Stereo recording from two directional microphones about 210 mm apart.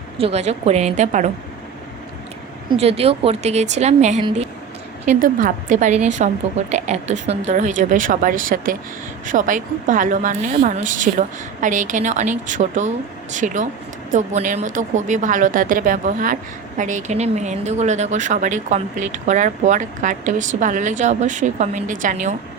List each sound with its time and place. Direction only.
0.2 s a woman's voice: 30° right (ahead or behind)
2.8 s a woman's voice: 30° right (ahead or behind)